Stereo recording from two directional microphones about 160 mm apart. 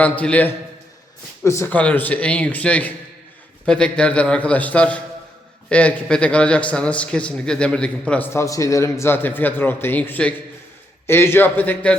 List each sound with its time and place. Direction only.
0.0 s a man's voice: 10° left (ahead or behind)